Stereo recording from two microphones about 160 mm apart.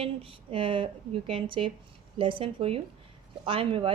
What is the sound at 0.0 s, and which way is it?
A woman's voice, 35° right (ahead or behind).